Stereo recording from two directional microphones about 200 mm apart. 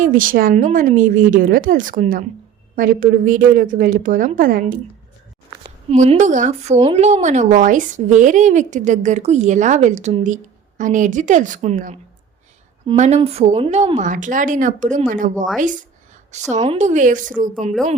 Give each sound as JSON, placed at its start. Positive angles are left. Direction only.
{"t": 0.0, "sound": "speech", "side_deg": -40}
{"t": 5.9, "sound": "speech", "side_deg": -35}